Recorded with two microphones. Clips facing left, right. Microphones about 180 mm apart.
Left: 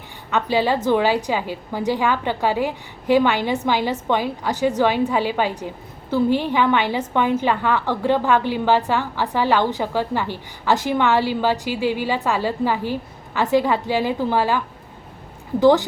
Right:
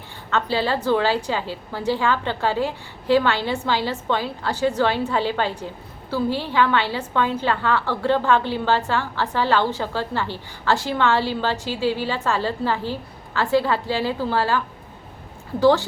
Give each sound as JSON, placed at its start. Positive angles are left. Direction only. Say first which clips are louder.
{"t": 0.3, "sound": "a woman's voice", "louder": "left 3 dB", "side_deg": 15}